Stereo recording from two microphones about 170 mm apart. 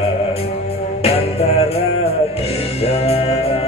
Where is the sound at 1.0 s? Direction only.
35° left (ahead or behind).